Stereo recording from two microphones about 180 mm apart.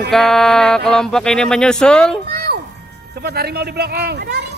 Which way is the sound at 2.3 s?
65° right (ahead or behind).